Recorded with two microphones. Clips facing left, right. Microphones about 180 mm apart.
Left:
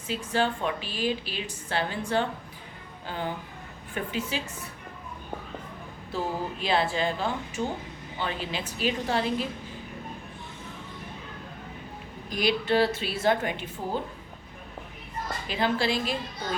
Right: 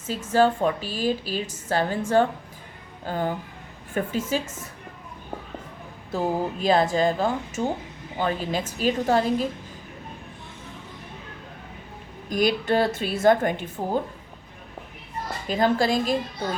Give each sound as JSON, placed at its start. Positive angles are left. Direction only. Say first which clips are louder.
{"t": 0.1, "sound": "a woman's voice", "louder": "right 7 dB", "side_deg": -40}
{"t": 6.1, "sound": "a woman's voice", "louder": "right 6 dB", "side_deg": -45}
{"t": 12.3, "sound": "a woman's voice", "louder": "right 3 dB", "side_deg": -45}
{"t": 15.4, "sound": "a woman's voice", "louder": "right 5 dB", "side_deg": -45}